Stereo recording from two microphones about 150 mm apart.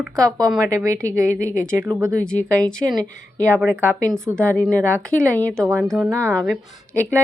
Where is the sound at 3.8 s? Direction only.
15° right (ahead or behind).